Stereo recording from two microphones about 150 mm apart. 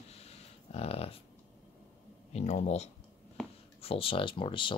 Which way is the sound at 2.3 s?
50° left (ahead or behind).